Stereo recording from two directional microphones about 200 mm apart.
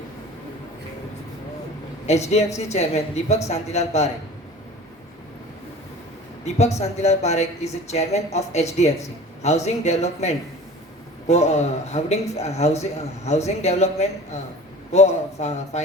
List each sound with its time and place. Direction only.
2.0 s a man's voice: 35° left (ahead or behind)
6.4 s a man's voice: 35° left (ahead or behind)